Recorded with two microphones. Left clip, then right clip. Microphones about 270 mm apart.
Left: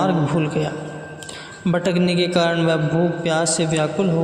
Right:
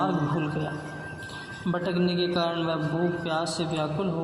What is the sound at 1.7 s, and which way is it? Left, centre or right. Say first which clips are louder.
A man's voice: left 8 dB; left.